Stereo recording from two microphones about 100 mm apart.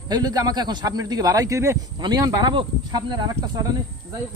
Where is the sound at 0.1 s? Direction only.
40° right (ahead or behind).